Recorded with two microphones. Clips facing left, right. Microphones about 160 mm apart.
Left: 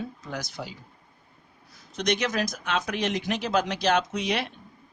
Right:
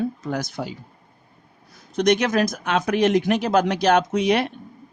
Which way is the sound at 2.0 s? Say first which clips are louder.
Right 8 dB; 50° right (ahead or behind).